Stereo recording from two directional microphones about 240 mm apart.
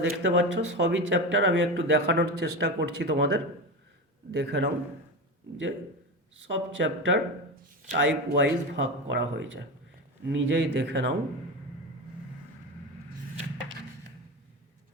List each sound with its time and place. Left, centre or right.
0.0 s speech: right
6.5 s speech: right